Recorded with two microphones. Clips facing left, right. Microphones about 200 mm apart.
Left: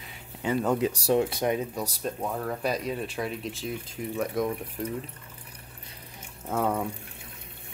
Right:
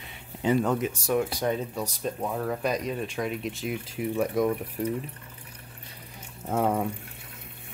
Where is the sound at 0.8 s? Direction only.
35° left (ahead or behind).